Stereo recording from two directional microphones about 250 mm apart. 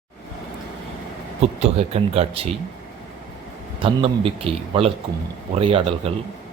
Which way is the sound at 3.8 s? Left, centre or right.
Right.